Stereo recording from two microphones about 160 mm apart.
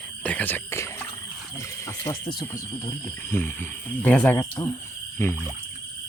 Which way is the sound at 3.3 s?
15° left (ahead or behind).